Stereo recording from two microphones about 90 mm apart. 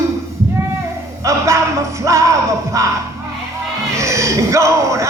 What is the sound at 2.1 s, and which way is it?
Music, 35° right (ahead or behind).